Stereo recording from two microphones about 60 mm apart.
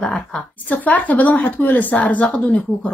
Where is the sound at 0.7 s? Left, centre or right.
Left.